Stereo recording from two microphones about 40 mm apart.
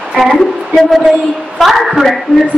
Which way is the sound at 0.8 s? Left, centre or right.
Centre.